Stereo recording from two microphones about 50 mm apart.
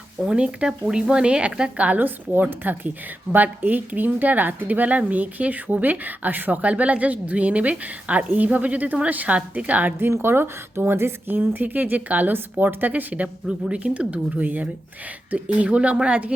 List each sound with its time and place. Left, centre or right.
0.3 s speech: centre
2.0 s a woman's voice: right
10.0 s speech: right
11.3 s a woman's voice: right